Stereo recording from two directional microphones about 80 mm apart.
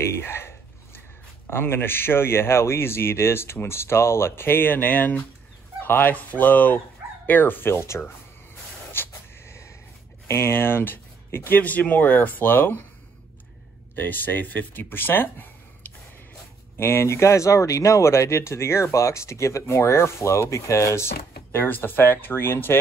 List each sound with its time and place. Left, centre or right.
0.0 s speech: left
1.5 s speech: left
8.9 s a sound: left
10.2 s speech: left
13.9 s speech: left
16.7 s speech: left